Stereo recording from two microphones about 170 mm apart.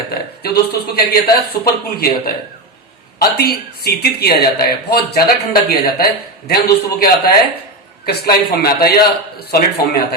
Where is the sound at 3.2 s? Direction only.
70° left (ahead or behind).